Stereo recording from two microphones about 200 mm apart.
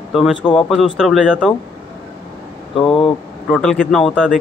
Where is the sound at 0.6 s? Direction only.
Centre (ahead or behind).